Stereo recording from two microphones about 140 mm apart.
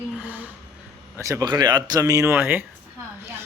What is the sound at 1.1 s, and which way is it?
Speech, 20° right (ahead or behind).